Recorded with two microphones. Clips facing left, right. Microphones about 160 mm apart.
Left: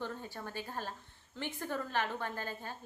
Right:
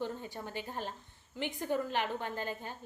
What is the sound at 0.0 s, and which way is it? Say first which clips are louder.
A woman's voice: right 3 dB; 15° right (ahead or behind).